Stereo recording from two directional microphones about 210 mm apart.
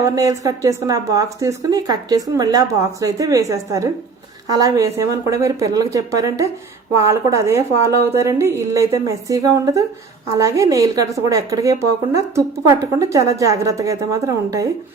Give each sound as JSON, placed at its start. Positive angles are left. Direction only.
{"t": 0.0, "sound": "a woman's voice", "side_deg": -15}